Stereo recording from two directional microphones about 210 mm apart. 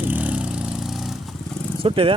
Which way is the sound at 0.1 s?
5° right (ahead or behind).